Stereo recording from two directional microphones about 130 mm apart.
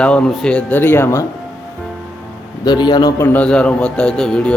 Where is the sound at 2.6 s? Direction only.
35° left (ahead or behind).